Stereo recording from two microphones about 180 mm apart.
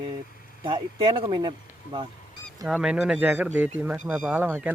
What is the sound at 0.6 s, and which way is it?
Speech, 25° right (ahead or behind).